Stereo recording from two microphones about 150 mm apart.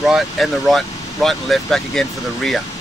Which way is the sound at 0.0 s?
Centre (ahead or behind).